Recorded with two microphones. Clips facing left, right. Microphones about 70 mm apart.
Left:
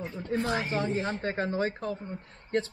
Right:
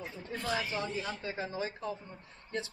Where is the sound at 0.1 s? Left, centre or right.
Left.